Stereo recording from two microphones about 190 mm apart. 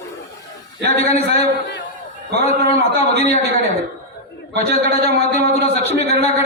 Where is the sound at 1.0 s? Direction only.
35° left (ahead or behind).